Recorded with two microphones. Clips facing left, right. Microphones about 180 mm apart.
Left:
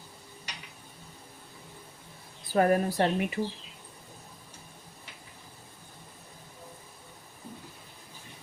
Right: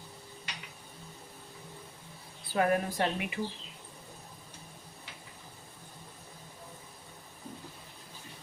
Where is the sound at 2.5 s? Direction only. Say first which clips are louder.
Left 4 dB; 40° left (ahead or behind).